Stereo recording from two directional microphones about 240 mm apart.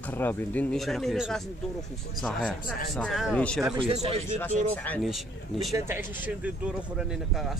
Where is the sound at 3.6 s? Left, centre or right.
Right.